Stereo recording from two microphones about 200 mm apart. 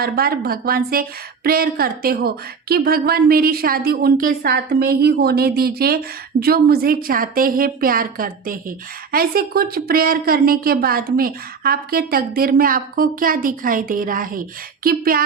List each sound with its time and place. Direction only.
0.0 s a woman's voice: 50° right (ahead or behind)